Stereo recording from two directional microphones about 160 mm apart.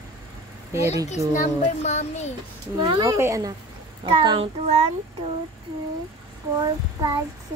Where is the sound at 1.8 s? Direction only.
45° left (ahead or behind).